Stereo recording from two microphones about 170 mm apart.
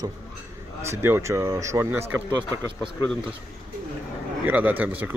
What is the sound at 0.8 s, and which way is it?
Speech, 15° right (ahead or behind).